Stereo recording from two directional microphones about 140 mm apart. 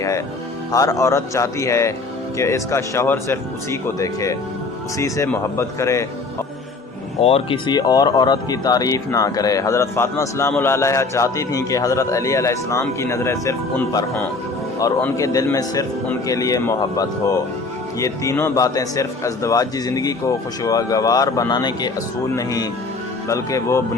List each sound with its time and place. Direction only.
0.7 s a man's voice: 25° left (ahead or behind)
7.2 s speech: 45° left (ahead or behind)
7.7 s a man's voice: 30° left (ahead or behind)
15.1 s a man's voice: 25° left (ahead or behind)